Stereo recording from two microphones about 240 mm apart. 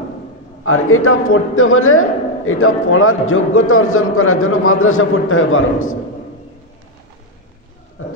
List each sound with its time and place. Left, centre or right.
0.7 s a man's voice: left